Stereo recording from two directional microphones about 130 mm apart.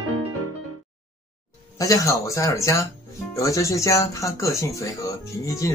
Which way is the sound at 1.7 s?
25° left (ahead or behind).